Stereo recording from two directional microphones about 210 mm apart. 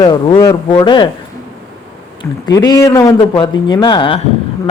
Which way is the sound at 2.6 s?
15° left (ahead or behind).